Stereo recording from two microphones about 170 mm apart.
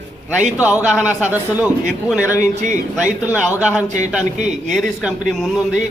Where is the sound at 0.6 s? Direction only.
10° right (ahead or behind).